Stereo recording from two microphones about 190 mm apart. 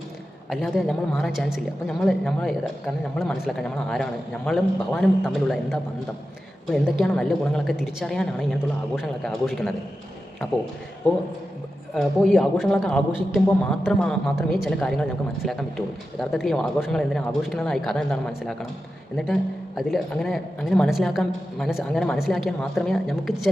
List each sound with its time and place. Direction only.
0.5 s a woman's voice: centre (ahead or behind)
11.9 s a woman's voice: centre (ahead or behind)